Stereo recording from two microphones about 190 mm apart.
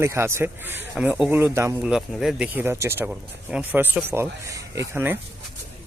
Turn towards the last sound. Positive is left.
turn(degrees=-10)  # may be behind; listen again after turning